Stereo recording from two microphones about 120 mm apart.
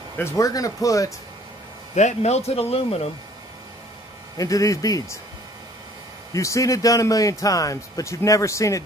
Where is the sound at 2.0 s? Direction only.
70° left (ahead or behind); by 3.1 s 55° left (ahead or behind).